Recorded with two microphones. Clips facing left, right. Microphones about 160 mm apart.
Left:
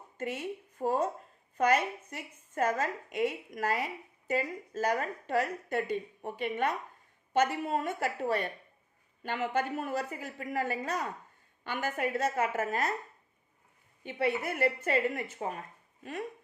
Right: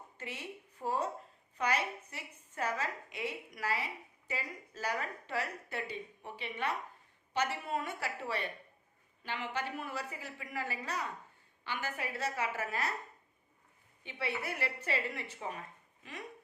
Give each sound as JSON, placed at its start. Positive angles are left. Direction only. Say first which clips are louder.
{"t": 0.2, "sound": "a woman's voice", "louder": "left 9 dB", "side_deg": 50}
{"t": 14.0, "sound": "speech", "louder": "left 8 dB", "side_deg": 45}